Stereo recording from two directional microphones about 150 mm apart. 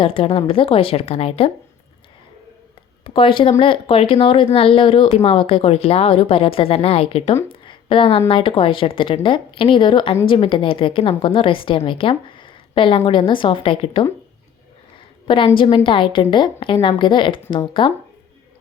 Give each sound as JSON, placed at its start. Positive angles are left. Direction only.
{"t": 0.0, "sound": "speech", "side_deg": 35}
{"t": 3.0, "sound": "speech", "side_deg": 35}
{"t": 7.6, "sound": "a sound", "side_deg": 35}
{"t": 8.3, "sound": "speech", "side_deg": 35}
{"t": 15.3, "sound": "speech", "side_deg": 35}